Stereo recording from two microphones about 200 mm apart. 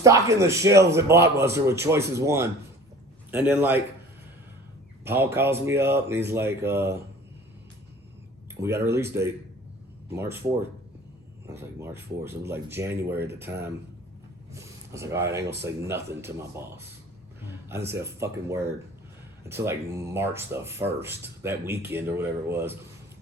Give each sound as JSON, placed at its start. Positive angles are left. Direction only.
{"t": 0.0, "sound": "speech", "side_deg": -15}
{"t": 5.0, "sound": "speech", "side_deg": -10}
{"t": 8.6, "sound": "speech", "side_deg": -15}
{"t": 11.4, "sound": "speech", "side_deg": -15}
{"t": 15.4, "sound": "speech", "side_deg": -55}
{"t": 15.6, "sound": "speech", "side_deg": -10}